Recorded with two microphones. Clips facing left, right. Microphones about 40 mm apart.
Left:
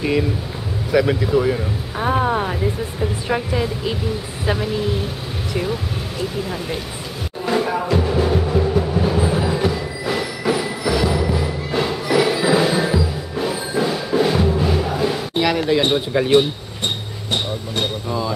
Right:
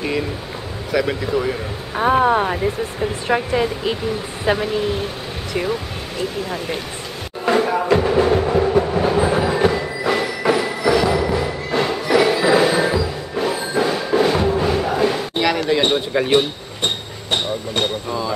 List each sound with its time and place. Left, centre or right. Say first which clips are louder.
0.9 s speech: left 3 dB; centre
2.0 s speech: right 4 dB; centre
7.4 s music: right 3 dB; centre
7.9 s music: right 4 dB; centre
15.9 s speech: even; centre
17.8 s speech: even; centre